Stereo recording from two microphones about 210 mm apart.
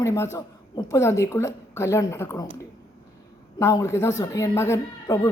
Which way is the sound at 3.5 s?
15° left (ahead or behind).